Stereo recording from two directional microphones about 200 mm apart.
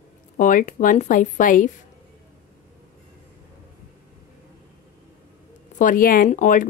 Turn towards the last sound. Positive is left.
turn(degrees=40)  # may be behind; listen again after turning